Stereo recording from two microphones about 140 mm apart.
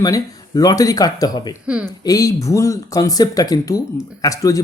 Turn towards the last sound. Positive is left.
turn(degrees=25)  # may be behind; listen again after turning